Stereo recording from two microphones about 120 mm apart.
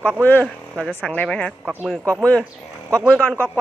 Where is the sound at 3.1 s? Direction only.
10° left (ahead or behind).